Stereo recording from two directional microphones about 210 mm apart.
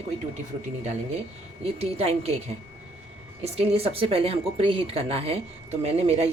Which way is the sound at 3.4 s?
30° right (ahead or behind).